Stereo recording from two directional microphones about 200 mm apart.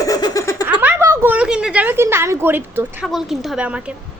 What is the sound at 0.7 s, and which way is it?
A woman's voice, 10° right (ahead or behind).